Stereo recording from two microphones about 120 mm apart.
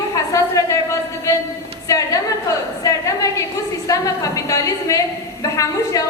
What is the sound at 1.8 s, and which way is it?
A woman's voice, 30° left (ahead or behind).